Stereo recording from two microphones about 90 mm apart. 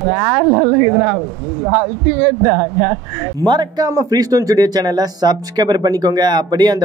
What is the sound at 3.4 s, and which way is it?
Speech, 55° right (ahead or behind).